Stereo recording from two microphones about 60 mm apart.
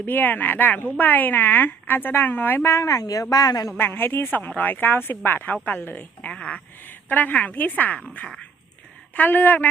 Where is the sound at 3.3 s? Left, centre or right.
Left.